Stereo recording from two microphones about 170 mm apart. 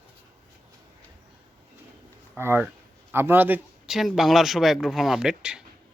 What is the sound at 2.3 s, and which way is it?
Speech, 10° right (ahead or behind).